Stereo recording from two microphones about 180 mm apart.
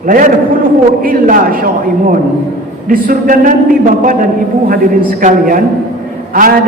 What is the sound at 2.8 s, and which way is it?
A man's voice, 50° right (ahead or behind).